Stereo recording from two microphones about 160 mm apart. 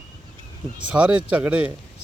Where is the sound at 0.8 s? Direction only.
10° right (ahead or behind).